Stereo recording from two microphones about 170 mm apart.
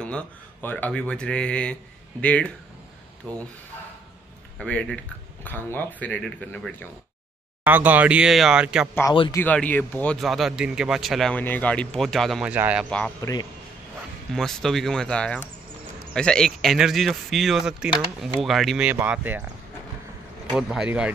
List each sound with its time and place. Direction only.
0.0 s speech: 10° left (ahead or behind)
4.6 s speech: 5° left (ahead or behind)
7.6 s speech: 10° right (ahead or behind)
9.3 s speech: 10° left (ahead or behind); by 12.8 s 10° right (ahead or behind)
13.2 s a man's voice: 20° left (ahead or behind)
14.3 s speech: centre (ahead or behind)
20.5 s speech: 5° right (ahead or behind)